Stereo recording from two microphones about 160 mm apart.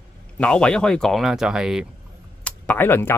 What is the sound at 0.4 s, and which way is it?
Speech, 5° left (ahead or behind).